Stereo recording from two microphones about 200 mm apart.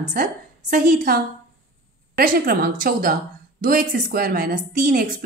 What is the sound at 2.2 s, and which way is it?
A woman's voice, 45° right (ahead or behind).